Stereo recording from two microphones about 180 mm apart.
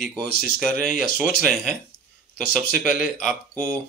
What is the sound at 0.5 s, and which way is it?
Speech, centre (ahead or behind).